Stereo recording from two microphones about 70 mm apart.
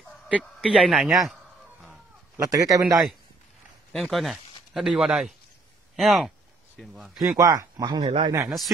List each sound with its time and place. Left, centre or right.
0.4 s a man's voice: centre
2.5 s speech: right
3.9 s a sound: centre
4.8 s a man's voice: centre
7.2 s speech: right
7.8 s speech: right